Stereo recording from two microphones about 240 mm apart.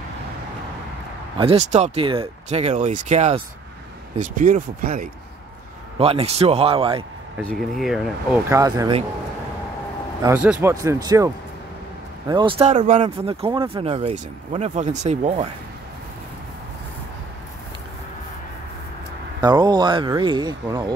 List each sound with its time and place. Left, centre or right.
1.4 s speech: right
5.9 s speech: right
7.4 s speech: centre
10.2 s speech: centre; by 15.4 s right
19.4 s speech: centre